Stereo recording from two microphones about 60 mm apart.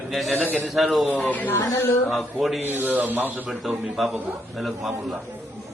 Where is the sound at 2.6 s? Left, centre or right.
Right.